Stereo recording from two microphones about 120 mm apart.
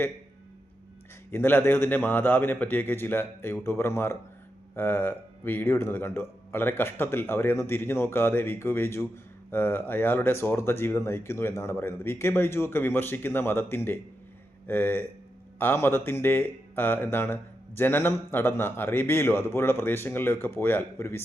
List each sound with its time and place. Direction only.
1.3 s speech: 15° left (ahead or behind)